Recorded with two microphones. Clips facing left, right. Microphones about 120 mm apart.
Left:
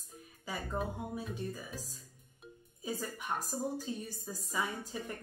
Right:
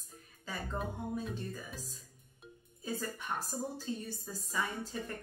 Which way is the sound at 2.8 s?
10° left (ahead or behind).